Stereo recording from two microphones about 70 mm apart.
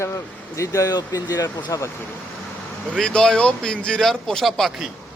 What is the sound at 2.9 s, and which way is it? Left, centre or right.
Speech, centre.